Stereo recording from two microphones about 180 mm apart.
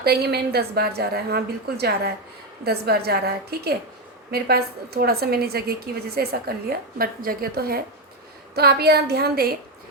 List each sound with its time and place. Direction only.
0.0 s a woman's voice: 60° right (ahead or behind)